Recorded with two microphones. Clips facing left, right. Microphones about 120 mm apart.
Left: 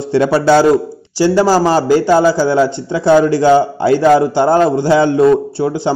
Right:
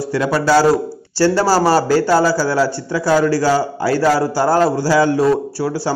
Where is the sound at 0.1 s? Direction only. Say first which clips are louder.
Left 5 dB; 25° left (ahead or behind).